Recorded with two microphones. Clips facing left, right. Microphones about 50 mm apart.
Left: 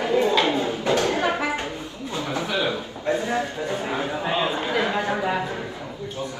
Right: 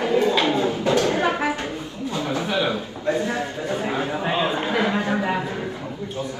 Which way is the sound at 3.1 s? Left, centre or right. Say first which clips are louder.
Even; left.